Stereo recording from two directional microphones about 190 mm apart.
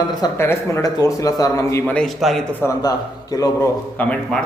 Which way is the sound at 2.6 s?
15° left (ahead or behind).